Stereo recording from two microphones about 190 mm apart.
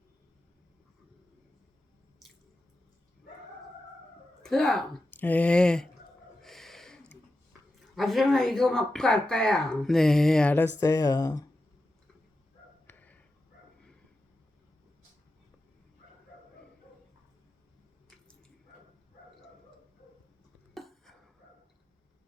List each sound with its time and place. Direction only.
2.2 s drip: centre (ahead or behind)
4.4 s a woman's voice: centre (ahead or behind)
6.4 s a sound: centre (ahead or behind)
7.9 s speech: centre (ahead or behind)
10.8 s speech: 15° left (ahead or behind)
12.9 s a sound: 10° left (ahead or behind)
20.7 s dishes: centre (ahead or behind)